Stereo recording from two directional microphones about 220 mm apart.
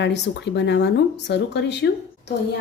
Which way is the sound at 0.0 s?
50° left (ahead or behind).